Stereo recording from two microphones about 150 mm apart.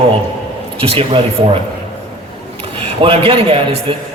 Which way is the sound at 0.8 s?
40° right (ahead or behind).